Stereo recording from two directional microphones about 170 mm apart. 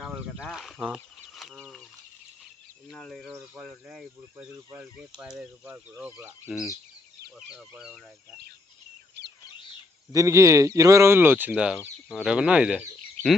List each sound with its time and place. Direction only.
0.0 s a sound: centre (ahead or behind)
0.9 s chicken: centre (ahead or behind)
2.9 s speech: centre (ahead or behind)
7.7 s speech: 5° right (ahead or behind)
10.1 s speech: 20° right (ahead or behind)
13.2 s a sound: 45° right (ahead or behind)